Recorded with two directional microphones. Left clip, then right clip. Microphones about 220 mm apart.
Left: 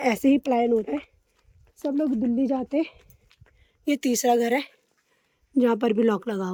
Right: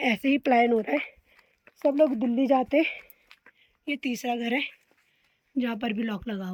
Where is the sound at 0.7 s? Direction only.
25° right (ahead or behind).